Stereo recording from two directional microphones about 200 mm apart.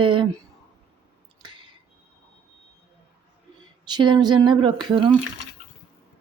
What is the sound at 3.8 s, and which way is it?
Speech, 20° right (ahead or behind).